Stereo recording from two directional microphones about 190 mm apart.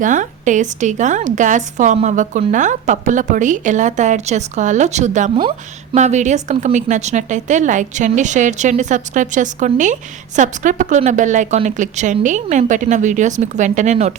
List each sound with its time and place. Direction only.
0.0 s speech: 40° right (ahead or behind)